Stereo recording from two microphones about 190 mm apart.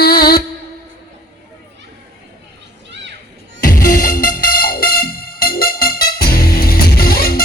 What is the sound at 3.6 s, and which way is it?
Music, 45° left (ahead or behind).